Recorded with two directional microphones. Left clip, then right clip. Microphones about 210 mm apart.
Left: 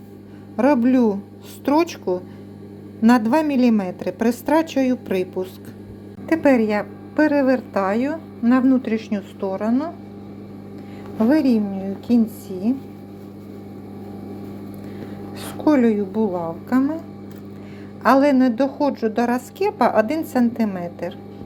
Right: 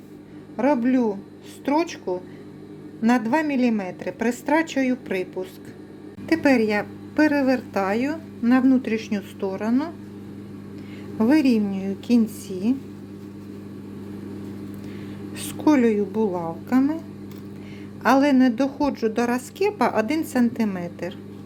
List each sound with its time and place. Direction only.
0.5 s a woman's voice: 15° left (ahead or behind)
6.2 s a woman's voice: 5° right (ahead or behind)
11.2 s a woman's voice: 15° right (ahead or behind)
15.4 s a woman's voice: 15° right (ahead or behind)
18.0 s a woman's voice: 15° right (ahead or behind)